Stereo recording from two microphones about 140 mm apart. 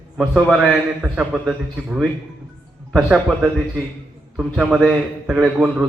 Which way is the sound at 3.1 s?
5° right (ahead or behind).